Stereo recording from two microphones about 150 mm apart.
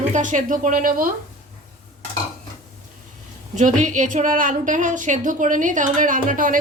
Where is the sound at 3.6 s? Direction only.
55° right (ahead or behind).